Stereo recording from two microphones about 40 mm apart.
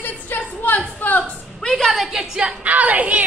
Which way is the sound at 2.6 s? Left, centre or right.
Right.